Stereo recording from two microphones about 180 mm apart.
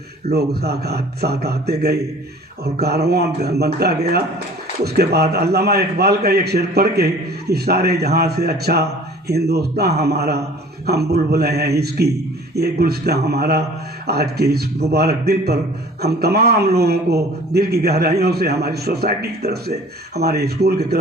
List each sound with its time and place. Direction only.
0.3 s a man's voice: 60° right (ahead or behind)